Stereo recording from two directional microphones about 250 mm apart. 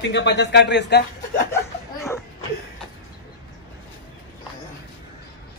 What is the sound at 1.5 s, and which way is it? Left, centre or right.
Laughter, centre.